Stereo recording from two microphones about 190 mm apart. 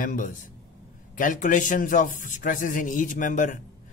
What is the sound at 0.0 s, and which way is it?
A man's voice, 45° left (ahead or behind).